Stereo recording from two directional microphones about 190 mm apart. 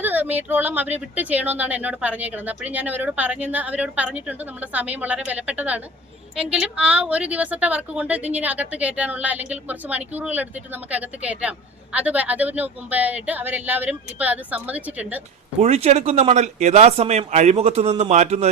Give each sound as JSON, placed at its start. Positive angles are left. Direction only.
{"t": 0.0, "sound": "speech", "side_deg": -10}
{"t": 15.6, "sound": "a man's voice", "side_deg": -35}